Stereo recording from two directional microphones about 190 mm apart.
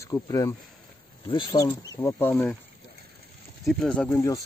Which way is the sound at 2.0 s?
10° left (ahead or behind).